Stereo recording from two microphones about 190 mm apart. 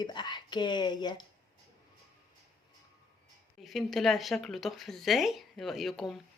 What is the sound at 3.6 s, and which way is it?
A woman's voice, centre (ahead or behind).